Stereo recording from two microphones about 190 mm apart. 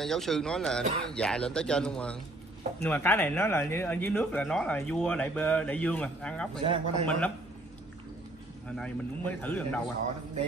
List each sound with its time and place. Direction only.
0.0 s speech: centre (ahead or behind)
6.6 s a man's voice: 30° right (ahead or behind)
7.1 s speech: 5° left (ahead or behind)
8.6 s speech: 5° left (ahead or behind)